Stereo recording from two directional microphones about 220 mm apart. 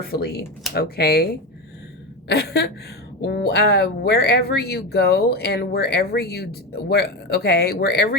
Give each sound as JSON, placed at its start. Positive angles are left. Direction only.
{"t": 0.1, "sound": "speech", "side_deg": 45}